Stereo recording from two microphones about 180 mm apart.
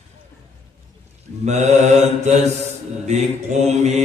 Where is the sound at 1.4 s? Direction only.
40° right (ahead or behind).